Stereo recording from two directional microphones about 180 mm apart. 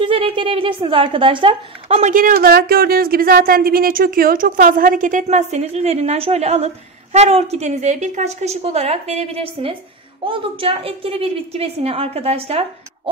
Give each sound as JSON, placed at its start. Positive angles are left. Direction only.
{"t": 0.0, "sound": "a woman's voice", "side_deg": -30}